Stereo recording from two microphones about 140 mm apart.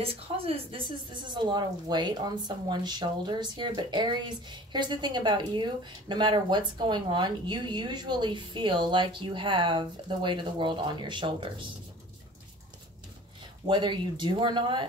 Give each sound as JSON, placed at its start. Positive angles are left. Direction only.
{"t": 0.0, "sound": "speech", "side_deg": -40}
{"t": 13.7, "sound": "speech", "side_deg": -35}